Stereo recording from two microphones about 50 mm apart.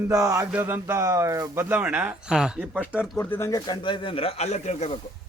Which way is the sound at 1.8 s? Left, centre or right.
Right.